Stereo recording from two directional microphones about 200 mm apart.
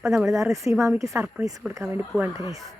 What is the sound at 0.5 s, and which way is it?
Speech, 15° right (ahead or behind).